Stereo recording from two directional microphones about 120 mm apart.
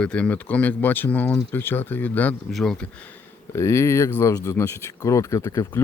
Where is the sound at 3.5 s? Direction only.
25° left (ahead or behind).